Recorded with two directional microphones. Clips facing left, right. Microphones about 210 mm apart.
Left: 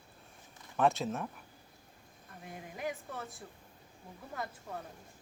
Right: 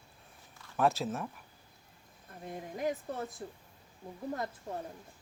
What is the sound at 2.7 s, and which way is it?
Speech, 40° right (ahead or behind).